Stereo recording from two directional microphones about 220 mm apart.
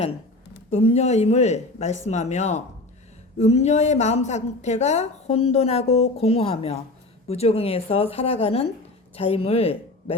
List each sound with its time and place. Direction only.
0.7 s a woman's voice: 30° left (ahead or behind)